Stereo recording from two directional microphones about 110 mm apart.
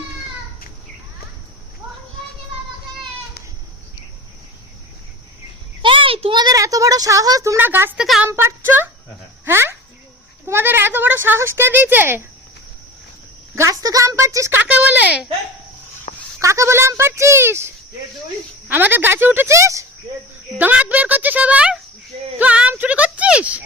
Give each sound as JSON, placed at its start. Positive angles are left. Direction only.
{"t": 5.8, "sound": "a sound", "side_deg": -50}
{"t": 6.3, "sound": "speech", "side_deg": -35}
{"t": 7.9, "sound": "speech", "side_deg": 0}
{"t": 8.3, "sound": "speech", "side_deg": -25}
{"t": 13.6, "sound": "speech", "side_deg": -30}
{"t": 14.6, "sound": "a woman's voice", "side_deg": -15}
{"t": 16.1, "sound": "a sound", "side_deg": 90}
{"t": 16.4, "sound": "speech", "side_deg": -25}
{"t": 18.7, "sound": "speech", "side_deg": -15}
{"t": 20.6, "sound": "a woman's voice", "side_deg": -15}